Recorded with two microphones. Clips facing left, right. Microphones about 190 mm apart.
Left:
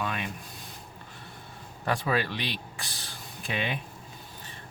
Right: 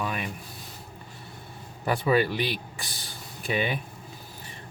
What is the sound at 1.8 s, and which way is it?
Speech, 5° right (ahead or behind).